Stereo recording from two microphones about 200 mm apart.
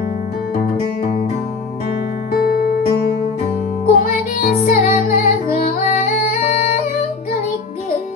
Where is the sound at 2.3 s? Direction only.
50° left (ahead or behind).